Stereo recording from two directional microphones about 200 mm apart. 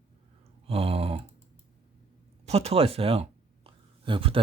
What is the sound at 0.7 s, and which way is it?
Speech, 30° right (ahead or behind).